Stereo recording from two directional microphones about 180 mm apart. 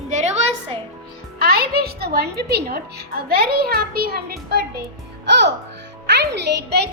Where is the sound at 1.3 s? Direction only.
60° right (ahead or behind).